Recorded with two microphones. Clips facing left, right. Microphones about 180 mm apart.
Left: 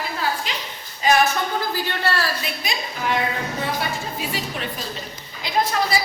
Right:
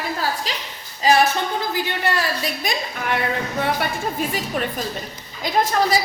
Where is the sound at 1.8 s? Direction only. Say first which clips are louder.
Right 1 dB; 15° right (ahead or behind).